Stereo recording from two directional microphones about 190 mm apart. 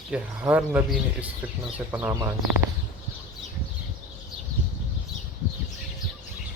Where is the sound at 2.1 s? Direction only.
15° right (ahead or behind).